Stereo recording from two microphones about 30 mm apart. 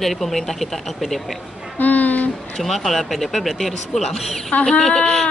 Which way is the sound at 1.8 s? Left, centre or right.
Left.